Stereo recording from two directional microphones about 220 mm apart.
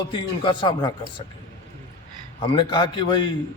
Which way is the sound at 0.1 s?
20° left (ahead or behind).